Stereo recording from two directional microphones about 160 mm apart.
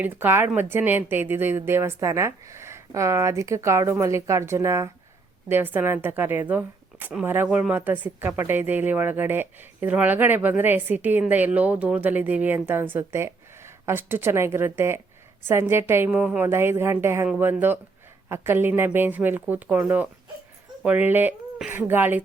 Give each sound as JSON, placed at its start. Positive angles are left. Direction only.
{"t": 0.0, "sound": "a woman's voice", "side_deg": -15}